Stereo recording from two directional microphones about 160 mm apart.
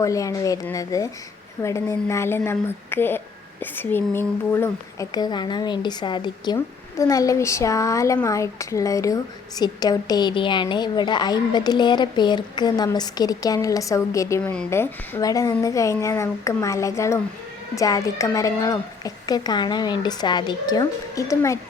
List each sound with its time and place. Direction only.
0.0 s a woman's voice: 20° left (ahead or behind)